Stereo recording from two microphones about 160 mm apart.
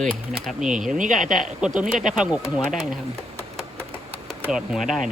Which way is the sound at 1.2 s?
55° right (ahead or behind).